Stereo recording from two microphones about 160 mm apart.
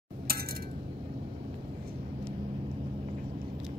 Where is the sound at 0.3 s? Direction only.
70° right (ahead or behind).